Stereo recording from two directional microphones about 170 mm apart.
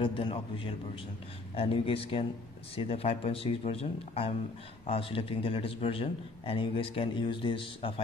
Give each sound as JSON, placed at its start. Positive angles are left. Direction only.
{"t": 0.0, "sound": "a man's voice", "side_deg": 30}